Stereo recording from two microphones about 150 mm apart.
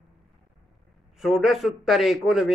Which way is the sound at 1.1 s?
Centre (ahead or behind).